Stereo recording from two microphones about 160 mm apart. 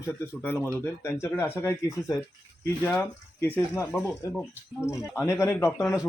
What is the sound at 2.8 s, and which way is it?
Speech, 10° left (ahead or behind).